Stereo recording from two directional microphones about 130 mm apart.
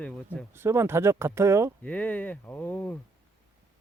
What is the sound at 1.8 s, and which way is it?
Speech, 10° left (ahead or behind).